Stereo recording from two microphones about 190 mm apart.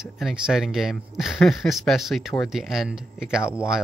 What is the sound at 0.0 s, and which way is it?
Speech, 5° right (ahead or behind).